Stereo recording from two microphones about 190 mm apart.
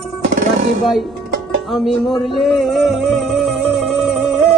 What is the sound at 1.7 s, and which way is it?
Music, centre (ahead or behind).